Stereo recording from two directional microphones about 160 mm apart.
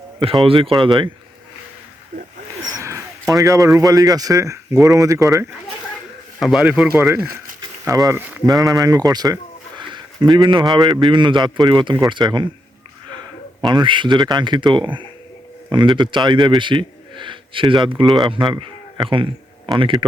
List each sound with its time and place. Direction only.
0.4 s speech: 35° right (ahead or behind)
2.7 s speech: 20° right (ahead or behind)
6.4 s a man's voice: 5° right (ahead or behind)
7.6 s a sound: 20° right (ahead or behind)
8.4 s a man's voice: 25° right (ahead or behind)
13.6 s a man's voice: 30° right (ahead or behind)